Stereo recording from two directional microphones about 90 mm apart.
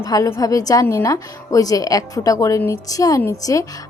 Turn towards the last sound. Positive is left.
turn(degrees=40)  # may be behind; listen again after turning